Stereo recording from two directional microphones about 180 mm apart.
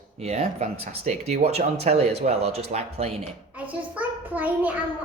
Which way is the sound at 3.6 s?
10° right (ahead or behind).